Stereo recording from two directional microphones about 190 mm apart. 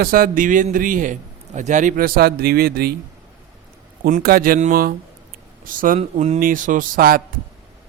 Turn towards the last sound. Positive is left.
turn(degrees=-50)  # may be behind; listen again after turning